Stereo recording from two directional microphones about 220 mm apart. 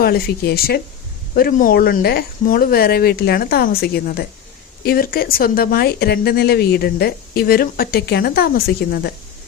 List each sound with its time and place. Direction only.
0.0 s speech: 45° left (ahead or behind)